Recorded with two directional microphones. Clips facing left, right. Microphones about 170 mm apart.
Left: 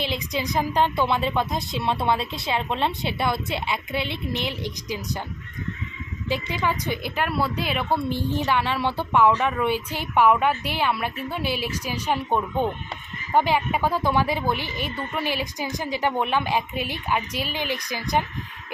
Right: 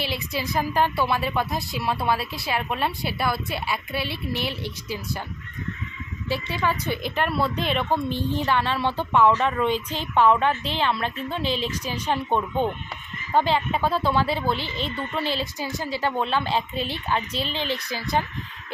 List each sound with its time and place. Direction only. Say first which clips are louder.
0.0 s speech: left 1 dB; 20° left (ahead or behind)
6.2 s a woman's voice: even; 15° left (ahead or behind)